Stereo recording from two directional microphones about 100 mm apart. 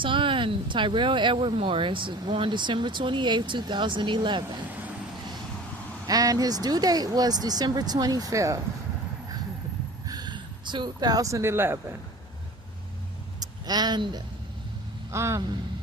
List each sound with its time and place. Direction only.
0.0 s speech: 55° right (ahead or behind)
6.1 s speech: 40° right (ahead or behind)
10.1 s speech: 45° right (ahead or behind); by 11.8 s 25° right (ahead or behind)
13.4 s a sound: 45° right (ahead or behind)
15.1 s speech: 30° right (ahead or behind)